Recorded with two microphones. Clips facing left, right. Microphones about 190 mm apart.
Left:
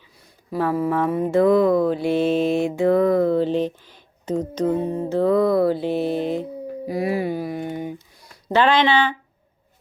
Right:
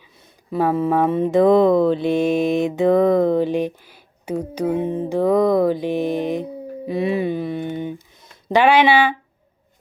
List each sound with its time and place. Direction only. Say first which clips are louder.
0.2 s speech: right 3 dB; 25° right (ahead or behind)
4.9 s mantra: right 1 dB; 15° right (ahead or behind)
8.5 s speech: right 3 dB; 10° right (ahead or behind)